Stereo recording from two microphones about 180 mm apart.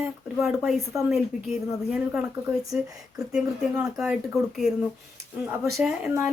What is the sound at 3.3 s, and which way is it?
Speech, 5° right (ahead or behind).